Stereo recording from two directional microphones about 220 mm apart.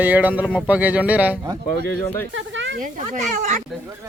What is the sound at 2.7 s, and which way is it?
Speech, 35° right (ahead or behind).